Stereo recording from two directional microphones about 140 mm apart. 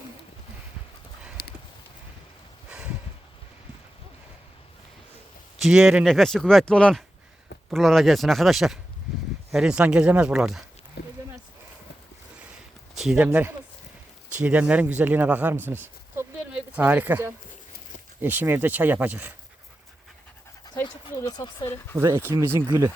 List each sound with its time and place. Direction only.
1.4 s clip-clop: 90° left
2.6 s a sound: 10° right (ahead or behind)
5.5 s speech: 5° right (ahead or behind)
13.0 s speech: 10° right (ahead or behind)
15.6 s a sound: 15° right (ahead or behind)
16.7 s speech: 10° right (ahead or behind)
21.2 s speech: 30° left (ahead or behind)
21.6 s speech: 20° left (ahead or behind)
21.9 s speech: 20° right (ahead or behind)